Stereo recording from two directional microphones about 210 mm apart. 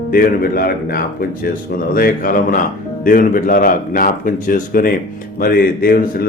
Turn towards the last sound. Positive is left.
turn(degrees=45)  # may be behind; listen again after turning